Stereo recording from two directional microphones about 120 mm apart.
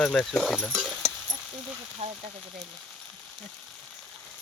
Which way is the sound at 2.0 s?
45° right (ahead or behind).